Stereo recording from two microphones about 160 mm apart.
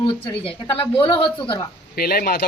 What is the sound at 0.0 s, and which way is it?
Speech, 35° left (ahead or behind).